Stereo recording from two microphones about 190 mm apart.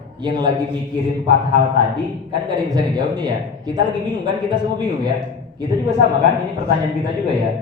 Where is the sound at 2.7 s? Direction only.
20° right (ahead or behind).